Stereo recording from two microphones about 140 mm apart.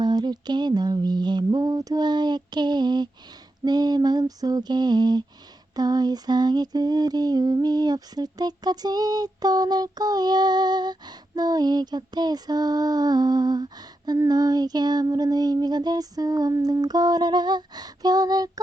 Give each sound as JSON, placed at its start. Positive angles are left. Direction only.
{"t": 0.0, "sound": "female singing", "side_deg": -30}